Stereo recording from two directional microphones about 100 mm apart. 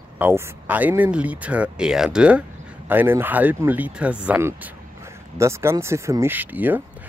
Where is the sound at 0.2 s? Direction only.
15° right (ahead or behind).